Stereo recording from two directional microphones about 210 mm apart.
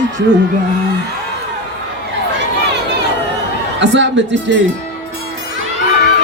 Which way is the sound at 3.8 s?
60° right (ahead or behind).